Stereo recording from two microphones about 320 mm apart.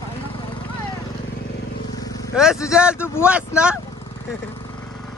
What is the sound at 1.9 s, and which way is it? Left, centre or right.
Vehicle, centre.